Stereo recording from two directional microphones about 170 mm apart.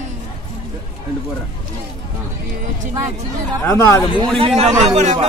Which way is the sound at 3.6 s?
15° left (ahead or behind).